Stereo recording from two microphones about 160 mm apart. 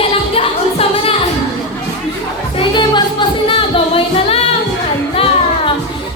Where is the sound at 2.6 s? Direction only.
30° left (ahead or behind).